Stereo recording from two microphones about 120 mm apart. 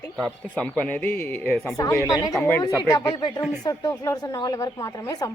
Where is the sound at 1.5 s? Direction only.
Centre (ahead or behind).